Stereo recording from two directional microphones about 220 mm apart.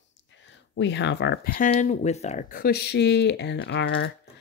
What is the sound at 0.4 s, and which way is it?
Speech, 55° left (ahead or behind).